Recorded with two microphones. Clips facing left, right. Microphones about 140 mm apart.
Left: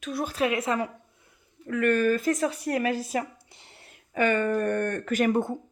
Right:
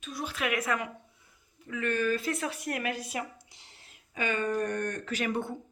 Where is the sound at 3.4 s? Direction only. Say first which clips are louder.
Left 6 dB; 55° left (ahead or behind).